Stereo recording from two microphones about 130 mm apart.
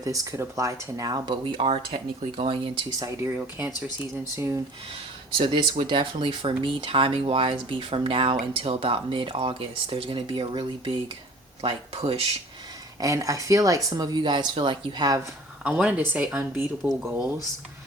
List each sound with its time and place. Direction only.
0.0 s speech: 25° right (ahead or behind); by 2.7 s 45° right (ahead or behind)
3.0 s speech: 20° right (ahead or behind)
5.8 s speech: 40° right (ahead or behind)
11.6 s speech: 50° right (ahead or behind)
13.0 s speech: 25° right (ahead or behind)
15.6 s speech: 5° right (ahead or behind)